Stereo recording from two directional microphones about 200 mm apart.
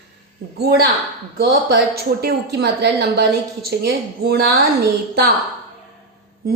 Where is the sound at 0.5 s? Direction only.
55° right (ahead or behind).